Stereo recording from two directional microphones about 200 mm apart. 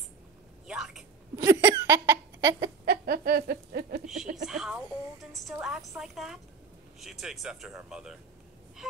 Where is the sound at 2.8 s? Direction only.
50° right (ahead or behind).